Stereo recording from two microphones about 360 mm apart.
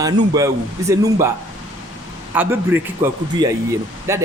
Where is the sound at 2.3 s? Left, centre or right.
Centre.